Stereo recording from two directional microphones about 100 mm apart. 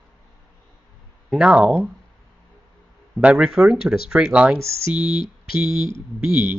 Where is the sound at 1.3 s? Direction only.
10° right (ahead or behind).